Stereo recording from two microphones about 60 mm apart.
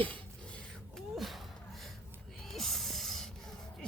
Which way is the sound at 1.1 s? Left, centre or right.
Centre.